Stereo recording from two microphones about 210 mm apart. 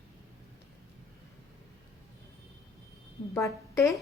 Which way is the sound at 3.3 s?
15° left (ahead or behind).